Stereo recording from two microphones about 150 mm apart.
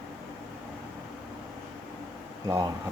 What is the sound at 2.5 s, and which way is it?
Speech, 25° right (ahead or behind).